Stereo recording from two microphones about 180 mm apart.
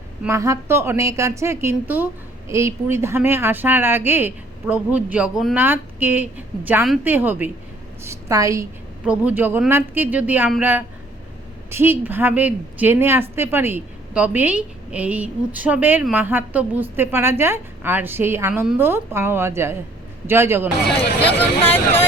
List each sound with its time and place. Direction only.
0.2 s a woman's voice: 15° right (ahead or behind)
21.6 s speech: 10° left (ahead or behind)